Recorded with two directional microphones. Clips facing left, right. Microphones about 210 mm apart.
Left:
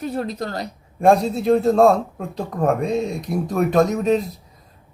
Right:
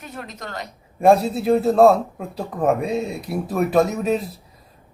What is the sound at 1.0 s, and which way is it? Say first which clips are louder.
A man's voice: even; 5° right (ahead or behind).